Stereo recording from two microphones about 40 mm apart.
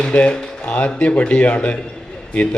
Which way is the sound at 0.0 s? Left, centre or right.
Left.